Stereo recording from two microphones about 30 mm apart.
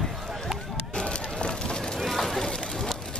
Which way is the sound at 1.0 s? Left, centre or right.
Left.